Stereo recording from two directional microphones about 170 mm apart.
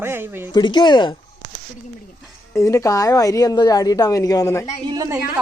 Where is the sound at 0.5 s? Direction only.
25° left (ahead or behind).